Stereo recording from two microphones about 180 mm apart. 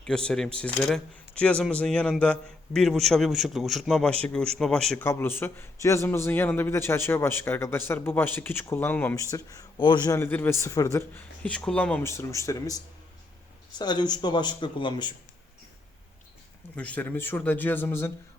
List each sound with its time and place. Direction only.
0.0 s a man's voice: 5° left (ahead or behind)
9.3 s a man's voice: 25° left (ahead or behind)
11.4 s a man's voice: 5° left (ahead or behind); by 15.1 s 25° left (ahead or behind)
16.7 s a man's voice: 10° left (ahead or behind)